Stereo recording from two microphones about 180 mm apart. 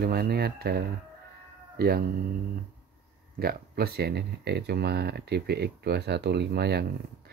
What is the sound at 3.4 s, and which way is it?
Speech, 60° right (ahead or behind).